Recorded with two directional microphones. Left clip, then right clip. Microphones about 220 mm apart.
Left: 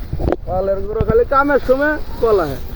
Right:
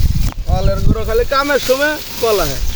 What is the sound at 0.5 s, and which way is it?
Speech, 20° right (ahead or behind).